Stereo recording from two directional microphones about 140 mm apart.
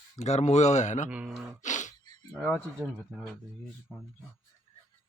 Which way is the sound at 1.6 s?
60° left (ahead or behind).